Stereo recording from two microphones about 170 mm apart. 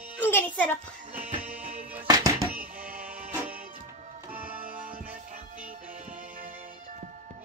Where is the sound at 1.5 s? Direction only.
10° right (ahead or behind).